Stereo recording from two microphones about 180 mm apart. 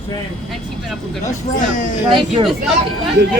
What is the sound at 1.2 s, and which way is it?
Speech, 45° left (ahead or behind).